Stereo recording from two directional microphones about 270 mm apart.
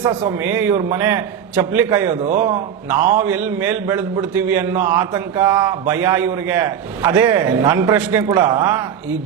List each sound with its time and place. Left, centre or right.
0.4 s a man's voice: centre
2.2 s a man's voice: right
3.1 s a man's voice: centre